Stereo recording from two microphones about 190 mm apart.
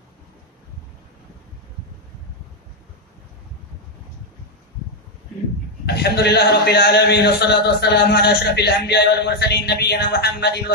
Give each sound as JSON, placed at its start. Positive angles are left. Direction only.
{"t": 5.9, "sound": "a man's voice", "side_deg": 60}